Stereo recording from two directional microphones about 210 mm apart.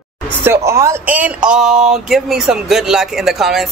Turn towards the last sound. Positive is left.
turn(degrees=0)  # may be behind; listen again after turning